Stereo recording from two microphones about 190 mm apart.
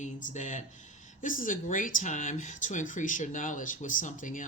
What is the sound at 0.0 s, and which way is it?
A man's voice, 40° left (ahead or behind).